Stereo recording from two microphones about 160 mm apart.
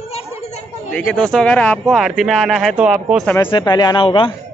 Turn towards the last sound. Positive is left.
turn(degrees=30)  # may be behind; listen again after turning